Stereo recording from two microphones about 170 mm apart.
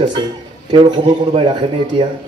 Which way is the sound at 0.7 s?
25° right (ahead or behind).